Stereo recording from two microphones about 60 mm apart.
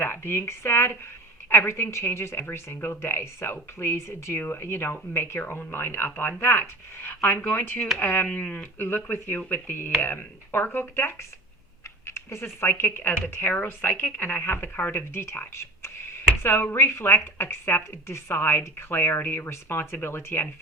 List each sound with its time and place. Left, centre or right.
0.0 s speech: left
8.8 s speech: left